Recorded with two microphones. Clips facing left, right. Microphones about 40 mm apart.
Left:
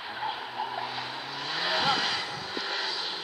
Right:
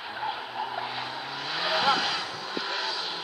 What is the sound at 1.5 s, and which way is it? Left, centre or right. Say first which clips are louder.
Vehicle: right 2 dB; centre.